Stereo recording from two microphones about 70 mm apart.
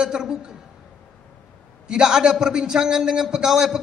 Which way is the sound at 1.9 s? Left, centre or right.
Centre.